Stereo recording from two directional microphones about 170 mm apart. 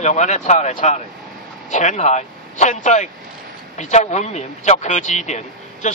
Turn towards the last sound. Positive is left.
turn(degrees=45)  # may be behind; listen again after turning